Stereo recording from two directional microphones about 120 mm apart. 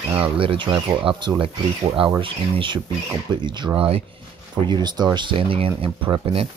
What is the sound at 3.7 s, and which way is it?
Speech, 50° right (ahead or behind).